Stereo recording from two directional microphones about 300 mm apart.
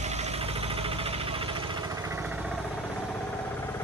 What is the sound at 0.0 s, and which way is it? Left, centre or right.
Engine, right.